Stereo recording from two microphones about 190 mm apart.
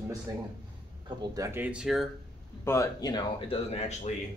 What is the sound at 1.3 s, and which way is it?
Speech, 15° right (ahead or behind).